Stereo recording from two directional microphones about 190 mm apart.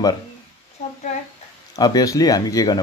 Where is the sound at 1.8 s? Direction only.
20° left (ahead or behind).